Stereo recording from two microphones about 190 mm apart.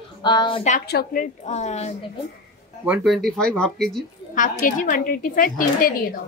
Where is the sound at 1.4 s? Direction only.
35° left (ahead or behind).